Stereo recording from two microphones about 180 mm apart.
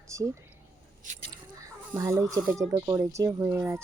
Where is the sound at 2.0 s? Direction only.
15° right (ahead or behind).